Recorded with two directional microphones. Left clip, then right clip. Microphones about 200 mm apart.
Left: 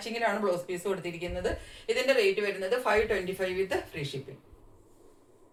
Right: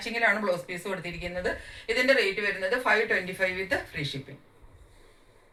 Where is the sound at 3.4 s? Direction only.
30° left (ahead or behind).